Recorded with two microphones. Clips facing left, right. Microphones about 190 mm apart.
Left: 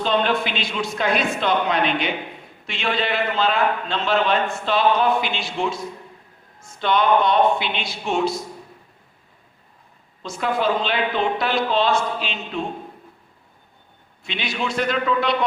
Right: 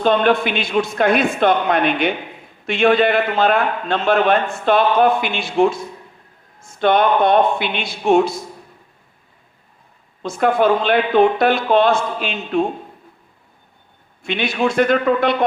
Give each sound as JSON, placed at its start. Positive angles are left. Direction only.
{"t": 0.0, "sound": "a man's voice", "side_deg": -55}
{"t": 10.2, "sound": "a man's voice", "side_deg": -55}
{"t": 14.3, "sound": "a man's voice", "side_deg": -55}